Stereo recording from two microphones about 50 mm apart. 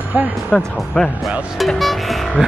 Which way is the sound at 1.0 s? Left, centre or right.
Centre.